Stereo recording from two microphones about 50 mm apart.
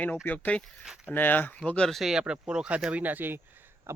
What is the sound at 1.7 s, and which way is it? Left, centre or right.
Speech, left.